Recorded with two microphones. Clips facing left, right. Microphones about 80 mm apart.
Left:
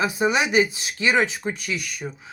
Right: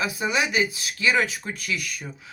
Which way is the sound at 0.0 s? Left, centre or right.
Left.